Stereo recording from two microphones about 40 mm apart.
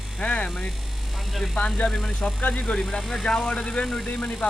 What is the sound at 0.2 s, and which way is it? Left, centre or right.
Speech, left.